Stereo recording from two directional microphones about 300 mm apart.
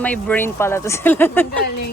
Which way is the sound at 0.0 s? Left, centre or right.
Centre.